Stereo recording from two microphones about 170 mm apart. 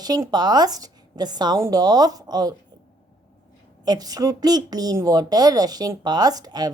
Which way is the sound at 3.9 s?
20° right (ahead or behind).